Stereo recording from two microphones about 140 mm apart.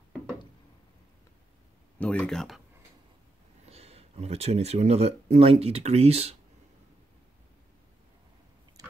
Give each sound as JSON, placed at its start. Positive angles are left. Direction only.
{"t": 2.0, "sound": "speech", "side_deg": 5}
{"t": 3.6, "sound": "speech", "side_deg": -45}